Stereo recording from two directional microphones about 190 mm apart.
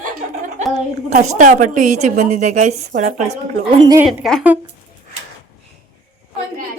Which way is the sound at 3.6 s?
20° right (ahead or behind).